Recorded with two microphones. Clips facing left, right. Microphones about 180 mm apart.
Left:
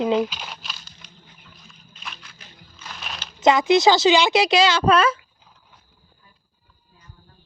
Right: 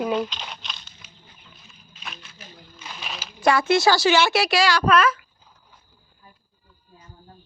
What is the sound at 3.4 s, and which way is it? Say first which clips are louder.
Speech: left 3 dB; 20° left (ahead or behind).